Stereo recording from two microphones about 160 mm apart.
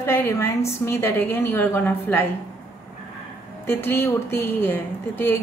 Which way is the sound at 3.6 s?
15° left (ahead or behind).